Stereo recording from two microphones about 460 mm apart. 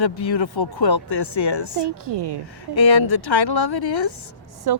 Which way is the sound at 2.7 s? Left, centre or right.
Left.